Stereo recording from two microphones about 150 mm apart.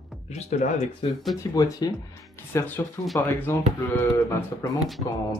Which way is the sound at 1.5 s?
25° left (ahead or behind).